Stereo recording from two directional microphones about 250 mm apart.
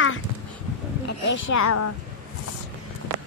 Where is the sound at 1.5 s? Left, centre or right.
Left.